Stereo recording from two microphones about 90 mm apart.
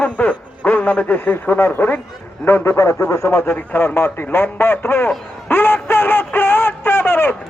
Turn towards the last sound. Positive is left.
turn(degrees=25)  # may be behind; listen again after turning